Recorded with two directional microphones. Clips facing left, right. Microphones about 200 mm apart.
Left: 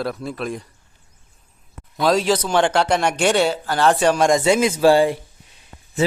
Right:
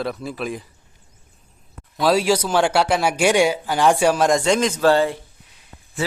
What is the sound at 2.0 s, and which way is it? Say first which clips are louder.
A man's voice: even; 5° right (ahead or behind).